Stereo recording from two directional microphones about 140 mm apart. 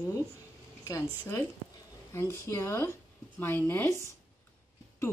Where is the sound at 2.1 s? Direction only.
20° left (ahead or behind).